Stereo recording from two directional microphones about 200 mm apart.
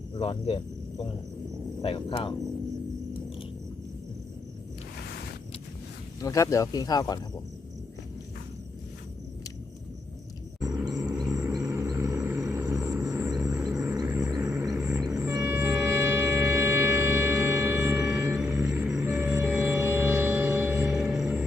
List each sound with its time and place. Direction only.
0.2 s speech: 30° left (ahead or behind)
6.1 s speech: 15° left (ahead or behind)
10.6 s a sound: 20° right (ahead or behind)
11.0 s music: 15° right (ahead or behind)